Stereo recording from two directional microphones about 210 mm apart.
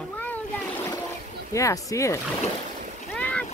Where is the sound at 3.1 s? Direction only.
5° left (ahead or behind).